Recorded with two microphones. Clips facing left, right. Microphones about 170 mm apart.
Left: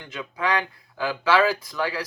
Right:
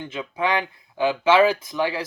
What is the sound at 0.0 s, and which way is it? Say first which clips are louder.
Speech: right 3 dB; 25° right (ahead or behind).